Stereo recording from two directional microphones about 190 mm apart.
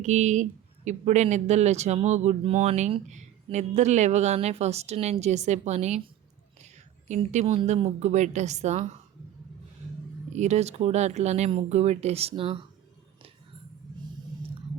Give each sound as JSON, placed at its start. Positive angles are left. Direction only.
{"t": 0.0, "sound": "speech", "side_deg": -40}
{"t": 7.1, "sound": "speech", "side_deg": -40}
{"t": 10.3, "sound": "speech", "side_deg": -35}